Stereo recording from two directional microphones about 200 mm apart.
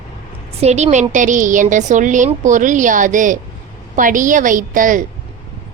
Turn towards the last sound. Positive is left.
turn(degrees=-40)  # may be behind; listen again after turning